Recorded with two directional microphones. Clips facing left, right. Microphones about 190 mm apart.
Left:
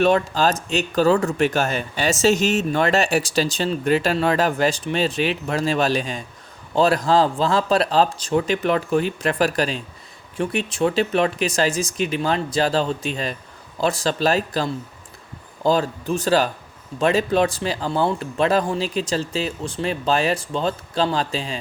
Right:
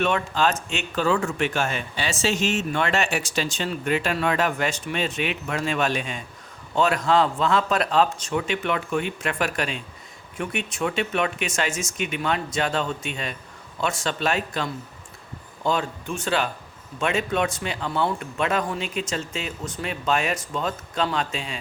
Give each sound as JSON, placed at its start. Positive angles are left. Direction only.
{"t": 0.0, "sound": "speech", "side_deg": 35}